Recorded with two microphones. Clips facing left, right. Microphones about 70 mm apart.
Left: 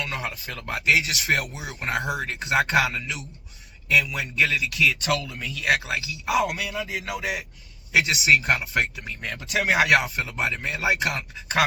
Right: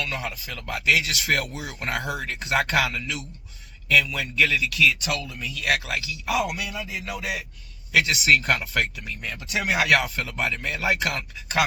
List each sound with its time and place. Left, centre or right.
0.0 s speech: left
9.3 s speech: left
9.7 s speech: left